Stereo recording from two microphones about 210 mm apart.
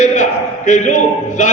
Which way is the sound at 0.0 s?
35° left (ahead or behind).